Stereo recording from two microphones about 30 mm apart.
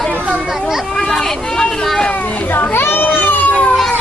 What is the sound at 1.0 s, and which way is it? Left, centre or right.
Speech, centre.